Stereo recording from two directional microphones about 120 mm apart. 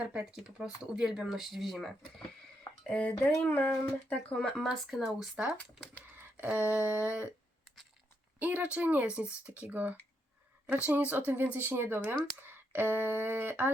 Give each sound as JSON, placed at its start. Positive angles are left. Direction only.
{"t": 0.0, "sound": "speech", "side_deg": -10}
{"t": 2.8, "sound": "speech", "side_deg": 10}
{"t": 6.1, "sound": "a sound", "side_deg": -15}
{"t": 8.4, "sound": "speech", "side_deg": -10}